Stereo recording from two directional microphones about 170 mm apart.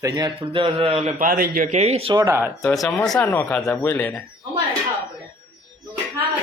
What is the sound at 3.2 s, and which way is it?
Speech, 10° left (ahead or behind).